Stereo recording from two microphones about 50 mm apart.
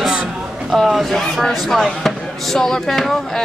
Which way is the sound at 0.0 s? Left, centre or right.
Centre.